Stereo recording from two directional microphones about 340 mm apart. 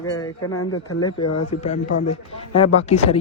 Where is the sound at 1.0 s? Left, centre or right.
Centre.